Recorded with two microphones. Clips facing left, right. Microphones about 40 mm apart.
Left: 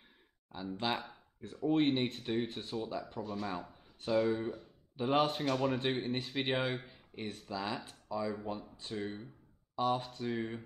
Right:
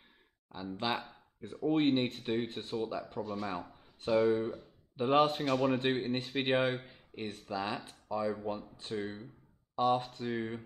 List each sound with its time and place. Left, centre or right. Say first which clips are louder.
0.5 s speech: right 1 dB; centre
1.4 s speech: right 2 dB; centre
1.7 s speech: right 1 dB; centre